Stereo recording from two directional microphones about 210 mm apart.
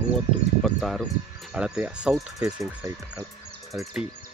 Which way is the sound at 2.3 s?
15° right (ahead or behind).